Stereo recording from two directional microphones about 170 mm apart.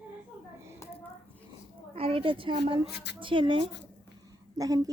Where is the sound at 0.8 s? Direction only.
15° left (ahead or behind).